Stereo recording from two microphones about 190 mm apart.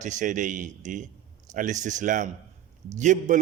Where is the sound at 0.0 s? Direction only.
40° right (ahead or behind).